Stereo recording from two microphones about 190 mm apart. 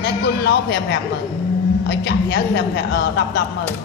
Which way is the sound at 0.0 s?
60° left (ahead or behind).